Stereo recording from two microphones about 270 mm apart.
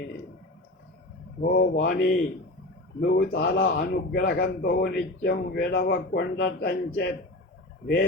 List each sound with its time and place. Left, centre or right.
1.4 s a man's voice: left